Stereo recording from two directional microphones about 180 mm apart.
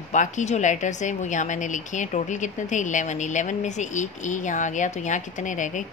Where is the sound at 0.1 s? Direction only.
40° left (ahead or behind).